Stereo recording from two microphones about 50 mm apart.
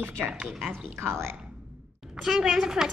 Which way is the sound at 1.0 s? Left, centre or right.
Right.